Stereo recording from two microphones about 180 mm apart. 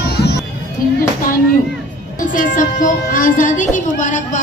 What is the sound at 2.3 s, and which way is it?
Speech, 45° left (ahead or behind).